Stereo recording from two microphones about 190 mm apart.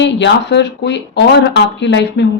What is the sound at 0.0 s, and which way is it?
Speech, 65° left (ahead or behind).